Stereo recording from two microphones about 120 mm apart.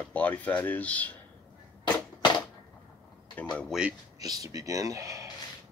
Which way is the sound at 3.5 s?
5° left (ahead or behind).